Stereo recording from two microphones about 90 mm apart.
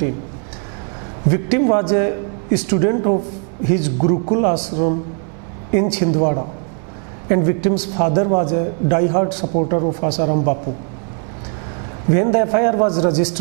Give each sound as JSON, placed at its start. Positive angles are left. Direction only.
{"t": 1.3, "sound": "a man's voice", "side_deg": -15}
{"t": 12.1, "sound": "a man's voice", "side_deg": -20}